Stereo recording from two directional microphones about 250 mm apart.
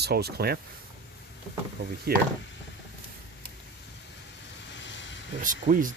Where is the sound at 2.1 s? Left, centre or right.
Right.